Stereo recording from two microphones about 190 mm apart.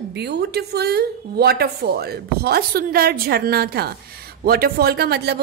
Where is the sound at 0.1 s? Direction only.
60° right (ahead or behind).